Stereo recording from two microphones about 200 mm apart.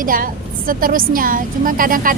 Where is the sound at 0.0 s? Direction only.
45° right (ahead or behind).